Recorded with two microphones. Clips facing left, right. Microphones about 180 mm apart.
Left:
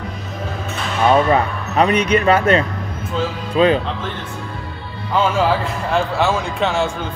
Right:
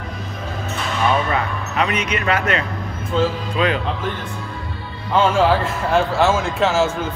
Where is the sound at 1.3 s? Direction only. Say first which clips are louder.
Left 5 dB; 35° left (ahead or behind).